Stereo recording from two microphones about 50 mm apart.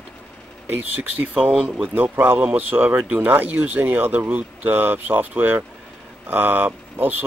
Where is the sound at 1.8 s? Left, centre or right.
Right.